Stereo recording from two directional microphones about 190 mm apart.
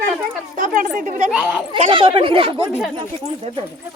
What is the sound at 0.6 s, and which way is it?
Speech, 45° right (ahead or behind).